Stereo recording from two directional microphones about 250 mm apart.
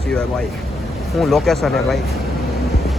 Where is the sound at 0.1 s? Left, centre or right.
Centre.